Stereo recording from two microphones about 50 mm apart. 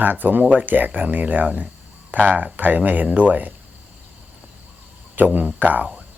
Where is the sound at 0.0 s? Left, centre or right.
Right.